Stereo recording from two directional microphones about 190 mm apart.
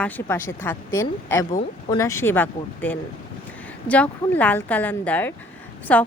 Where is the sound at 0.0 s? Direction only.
10° left (ahead or behind).